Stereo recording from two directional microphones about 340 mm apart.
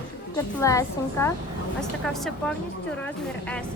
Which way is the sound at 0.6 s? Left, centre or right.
Centre.